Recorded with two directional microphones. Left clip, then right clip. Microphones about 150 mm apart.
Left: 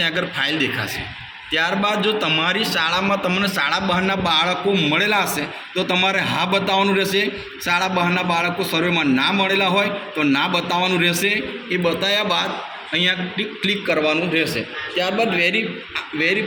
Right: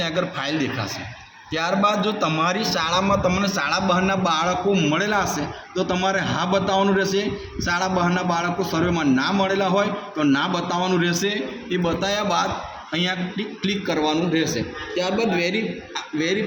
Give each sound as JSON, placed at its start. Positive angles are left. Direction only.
{"t": 0.3, "sound": "a man's voice", "side_deg": -35}
{"t": 5.2, "sound": "a man's voice", "side_deg": 0}
{"t": 5.7, "sound": "a man's voice", "side_deg": -20}